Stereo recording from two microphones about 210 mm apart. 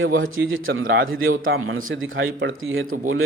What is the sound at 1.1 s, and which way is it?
Speech, 75° right (ahead or behind).